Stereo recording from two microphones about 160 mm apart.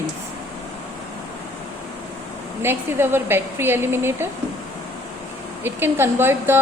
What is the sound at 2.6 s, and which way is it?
A woman's voice, 15° right (ahead or behind).